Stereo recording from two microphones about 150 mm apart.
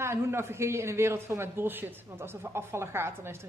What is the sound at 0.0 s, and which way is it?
A man's voice, 15° right (ahead or behind).